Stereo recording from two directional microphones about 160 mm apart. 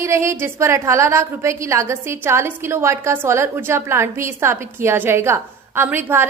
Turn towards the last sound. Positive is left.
turn(degrees=-15)  # may be behind; listen again after turning